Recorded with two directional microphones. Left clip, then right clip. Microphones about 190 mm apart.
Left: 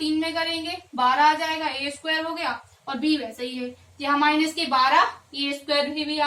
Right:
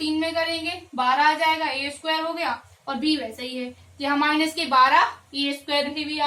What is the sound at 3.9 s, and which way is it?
A woman's voice, 20° right (ahead or behind).